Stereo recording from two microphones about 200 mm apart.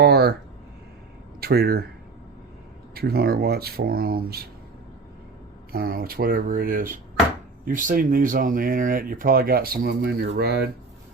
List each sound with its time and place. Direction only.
0.0 s speech: 55° right (ahead or behind)
1.4 s speech: 50° right (ahead or behind)
2.9 s speech: 50° right (ahead or behind)
5.7 s speech: 50° right (ahead or behind)